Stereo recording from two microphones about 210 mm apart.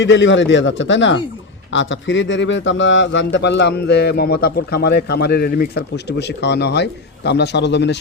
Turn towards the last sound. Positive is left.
turn(degrees=55)  # may be behind; listen again after turning